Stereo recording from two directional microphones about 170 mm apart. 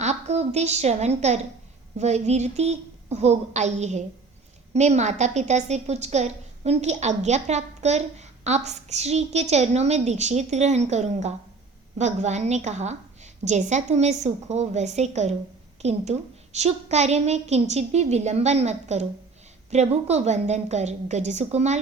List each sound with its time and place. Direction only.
0.0 s a woman's voice: 40° right (ahead or behind)